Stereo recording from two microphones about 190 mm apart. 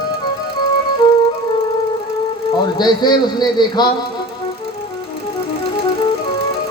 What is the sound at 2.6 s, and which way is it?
Speech, 20° left (ahead or behind).